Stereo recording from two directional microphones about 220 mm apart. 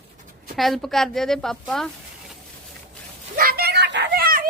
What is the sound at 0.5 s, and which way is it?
Speech, centre (ahead or behind).